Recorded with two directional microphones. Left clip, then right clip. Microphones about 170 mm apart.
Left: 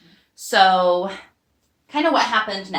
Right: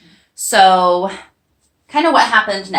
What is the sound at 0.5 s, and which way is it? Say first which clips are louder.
Speech: right 5 dB; 15° right (ahead or behind).